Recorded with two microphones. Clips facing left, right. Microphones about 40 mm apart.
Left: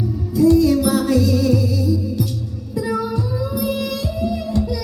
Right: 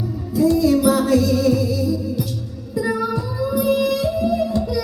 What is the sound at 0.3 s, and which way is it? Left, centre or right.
Music, centre.